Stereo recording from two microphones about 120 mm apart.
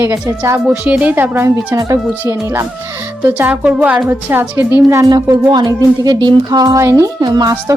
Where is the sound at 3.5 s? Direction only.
10° right (ahead or behind).